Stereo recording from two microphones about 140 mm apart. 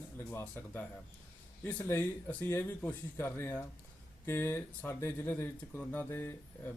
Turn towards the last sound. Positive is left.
turn(degrees=15)  # may be behind; listen again after turning